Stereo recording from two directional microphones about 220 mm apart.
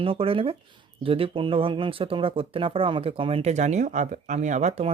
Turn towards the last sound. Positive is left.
turn(degrees=-35)  # may be behind; listen again after turning